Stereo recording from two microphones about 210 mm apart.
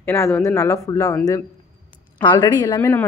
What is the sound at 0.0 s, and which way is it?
A woman's voice, 15° left (ahead or behind).